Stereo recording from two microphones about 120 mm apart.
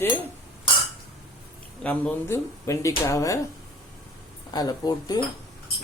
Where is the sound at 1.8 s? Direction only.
10° left (ahead or behind).